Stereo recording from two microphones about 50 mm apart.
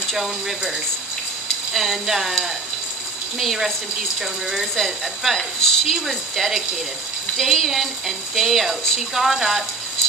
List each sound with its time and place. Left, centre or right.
0.1 s speech: centre